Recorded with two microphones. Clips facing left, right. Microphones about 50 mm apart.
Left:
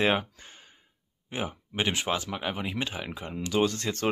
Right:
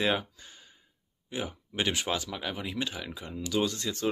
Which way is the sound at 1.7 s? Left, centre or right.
Left.